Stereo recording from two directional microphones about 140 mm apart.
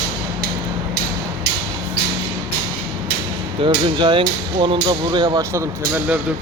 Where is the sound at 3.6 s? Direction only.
35° right (ahead or behind).